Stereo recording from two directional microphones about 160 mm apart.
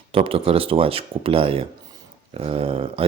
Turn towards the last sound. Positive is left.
turn(degrees=-35)  # may be behind; listen again after turning